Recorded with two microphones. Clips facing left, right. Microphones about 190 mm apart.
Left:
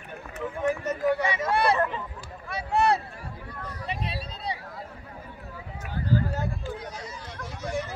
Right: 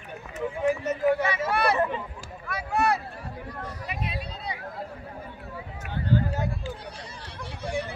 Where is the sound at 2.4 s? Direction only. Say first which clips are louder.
Left 2 dB; 30° left (ahead or behind).